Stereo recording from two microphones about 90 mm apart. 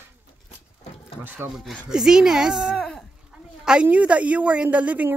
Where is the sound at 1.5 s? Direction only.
5° right (ahead or behind).